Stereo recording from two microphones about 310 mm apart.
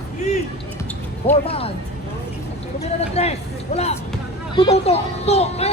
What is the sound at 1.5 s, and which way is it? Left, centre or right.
Speech, centre.